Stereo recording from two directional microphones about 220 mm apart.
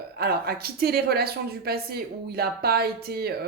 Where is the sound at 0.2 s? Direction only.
45° right (ahead or behind).